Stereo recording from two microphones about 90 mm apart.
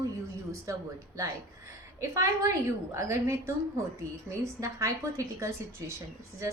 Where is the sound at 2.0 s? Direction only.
35° right (ahead or behind).